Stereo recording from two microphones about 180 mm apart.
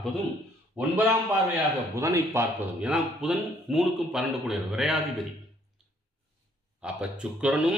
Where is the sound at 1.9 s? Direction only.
15° right (ahead or behind).